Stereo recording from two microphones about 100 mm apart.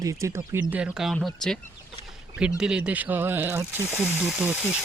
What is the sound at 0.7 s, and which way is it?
Speech, 10° right (ahead or behind).